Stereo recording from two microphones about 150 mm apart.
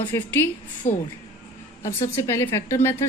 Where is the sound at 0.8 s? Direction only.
50° left (ahead or behind).